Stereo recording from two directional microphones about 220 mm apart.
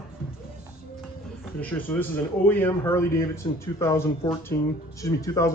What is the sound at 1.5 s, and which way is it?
Speech, 10° left (ahead or behind).